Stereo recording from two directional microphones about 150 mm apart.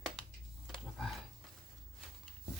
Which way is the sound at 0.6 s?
Centre (ahead or behind).